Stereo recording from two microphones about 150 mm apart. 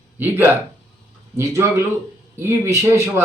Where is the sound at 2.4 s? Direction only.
15° right (ahead or behind).